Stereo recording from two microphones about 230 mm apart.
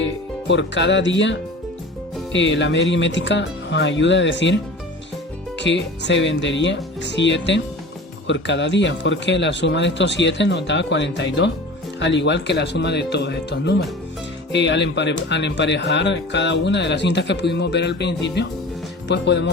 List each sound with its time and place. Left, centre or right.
0.0 s speech: left